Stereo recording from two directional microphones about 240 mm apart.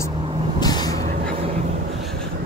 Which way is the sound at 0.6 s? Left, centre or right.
Centre.